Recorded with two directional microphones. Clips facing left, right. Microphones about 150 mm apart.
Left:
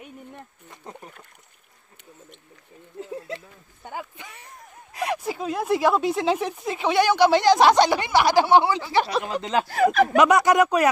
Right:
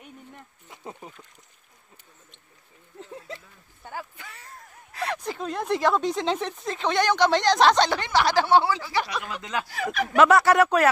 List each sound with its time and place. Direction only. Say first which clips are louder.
3.8 s speech: left 2 dB; 20° left (ahead or behind)
9.7 s speech: left 13 dB; 50° left (ahead or behind)
10.1 s speech: right 4 dB; 15° left (ahead or behind)